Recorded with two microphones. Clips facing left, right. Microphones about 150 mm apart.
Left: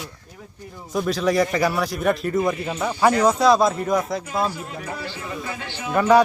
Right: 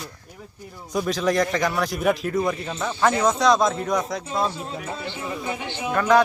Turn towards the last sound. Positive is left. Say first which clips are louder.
# left 2 dB
turn(degrees=10)  # may be behind; listen again after turning